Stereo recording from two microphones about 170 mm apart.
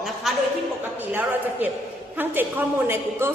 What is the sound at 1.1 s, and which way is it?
A woman's voice, 10° right (ahead or behind).